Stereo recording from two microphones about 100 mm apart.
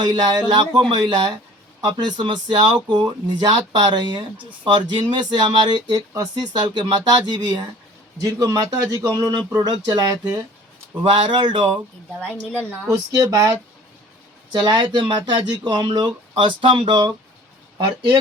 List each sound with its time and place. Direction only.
0.0 s speech: 45° right (ahead or behind)
12.2 s a woman's voice: 15° left (ahead or behind)
12.9 s speech: 35° right (ahead or behind)
14.5 s speech: 50° right (ahead or behind)